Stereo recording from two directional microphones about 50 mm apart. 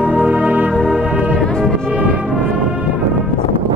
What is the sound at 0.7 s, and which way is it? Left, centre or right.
Music, centre.